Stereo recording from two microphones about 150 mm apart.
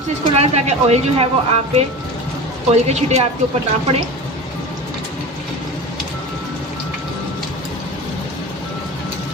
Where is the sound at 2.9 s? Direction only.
45° right (ahead or behind).